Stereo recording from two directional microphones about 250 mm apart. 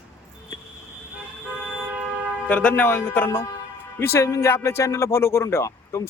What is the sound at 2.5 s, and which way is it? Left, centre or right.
A man's voice, centre.